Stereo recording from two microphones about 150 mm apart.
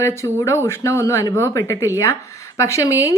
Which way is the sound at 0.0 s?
20° left (ahead or behind).